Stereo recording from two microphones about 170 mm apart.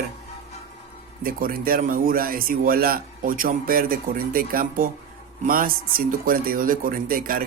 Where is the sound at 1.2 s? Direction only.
55° right (ahead or behind).